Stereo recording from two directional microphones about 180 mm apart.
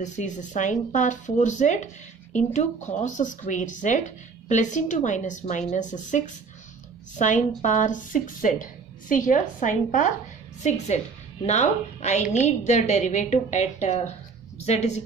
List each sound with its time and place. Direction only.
0.0 s a woman's voice: 40° left (ahead or behind)
11.4 s a woman's voice: 40° left (ahead or behind)